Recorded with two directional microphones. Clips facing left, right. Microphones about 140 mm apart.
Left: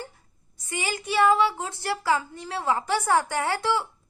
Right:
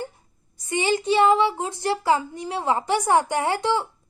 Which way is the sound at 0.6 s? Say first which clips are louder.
Right 8 dB; 25° right (ahead or behind).